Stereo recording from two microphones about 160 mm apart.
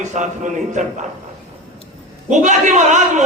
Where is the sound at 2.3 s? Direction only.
50° right (ahead or behind).